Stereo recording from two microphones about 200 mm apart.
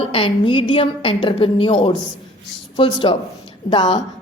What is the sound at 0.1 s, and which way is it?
Speech, 25° left (ahead or behind).